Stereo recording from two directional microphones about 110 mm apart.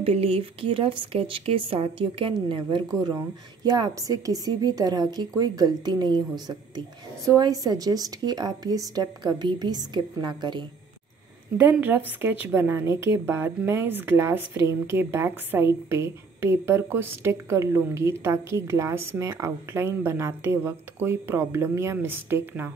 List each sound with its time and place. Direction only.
0.0 s speech: 65° right (ahead or behind)
2.9 s a woman's voice: 30° right (ahead or behind)
11.5 s a woman's voice: 20° right (ahead or behind)